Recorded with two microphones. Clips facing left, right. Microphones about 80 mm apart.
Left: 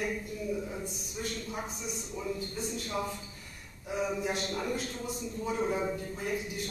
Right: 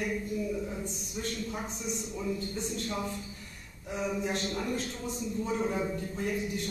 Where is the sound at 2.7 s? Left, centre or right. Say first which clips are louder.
Even; centre.